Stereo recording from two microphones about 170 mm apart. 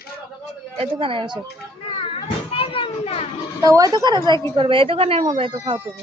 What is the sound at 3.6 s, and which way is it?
A woman's voice, 20° right (ahead or behind).